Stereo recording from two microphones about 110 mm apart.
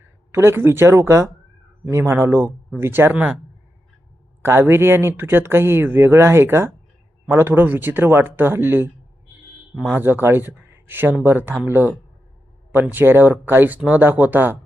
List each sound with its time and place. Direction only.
0.3 s speech: 20° right (ahead or behind)
4.4 s speech: 20° right (ahead or behind)